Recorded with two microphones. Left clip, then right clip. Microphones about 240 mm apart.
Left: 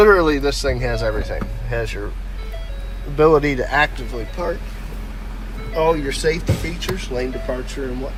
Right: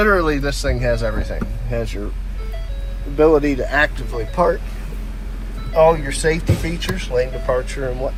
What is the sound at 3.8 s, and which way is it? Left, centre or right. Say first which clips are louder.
Speech: right 1 dB; centre.